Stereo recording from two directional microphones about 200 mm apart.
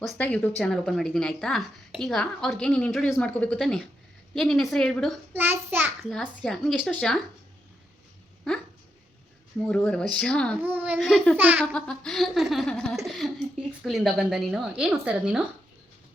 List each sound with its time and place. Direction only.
0.0 s speech: 5° left (ahead or behind)
5.3 s a child's voice: 10° right (ahead or behind)
6.0 s speech: centre (ahead or behind)
9.6 s speech: 5° left (ahead or behind)
11.3 s a child's voice: 10° right (ahead or behind)
11.6 s speech: 5° left (ahead or behind)